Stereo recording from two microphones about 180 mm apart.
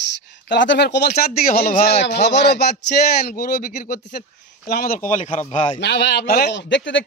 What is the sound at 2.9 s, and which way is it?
A man's voice, 55° left (ahead or behind).